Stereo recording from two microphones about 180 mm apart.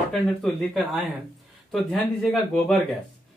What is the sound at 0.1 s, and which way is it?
Speech, centre (ahead or behind).